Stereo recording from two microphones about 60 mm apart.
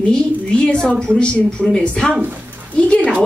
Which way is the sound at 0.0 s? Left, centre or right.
Centre.